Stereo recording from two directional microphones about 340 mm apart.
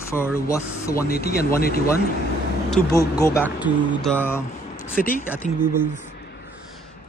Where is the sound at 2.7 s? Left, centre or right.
Centre.